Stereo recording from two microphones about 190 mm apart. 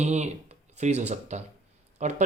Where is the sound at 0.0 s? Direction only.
35° right (ahead or behind).